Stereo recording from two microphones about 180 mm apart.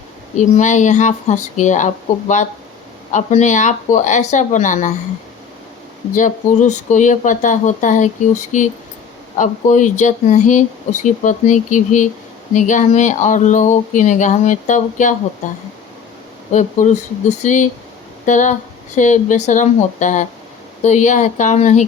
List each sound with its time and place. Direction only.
0.3 s speech: 40° left (ahead or behind)
6.1 s speech: 45° left (ahead or behind)
16.5 s speech: 40° left (ahead or behind)